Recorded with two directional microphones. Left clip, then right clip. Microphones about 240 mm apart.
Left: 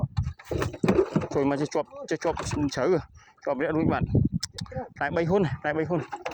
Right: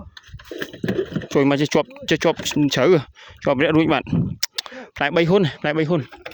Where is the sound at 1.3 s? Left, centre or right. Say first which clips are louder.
Right 8 dB; right.